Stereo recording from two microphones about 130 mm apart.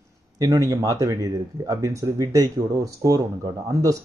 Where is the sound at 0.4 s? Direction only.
30° right (ahead or behind).